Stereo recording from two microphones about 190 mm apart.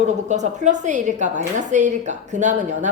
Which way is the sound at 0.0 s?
40° right (ahead or behind).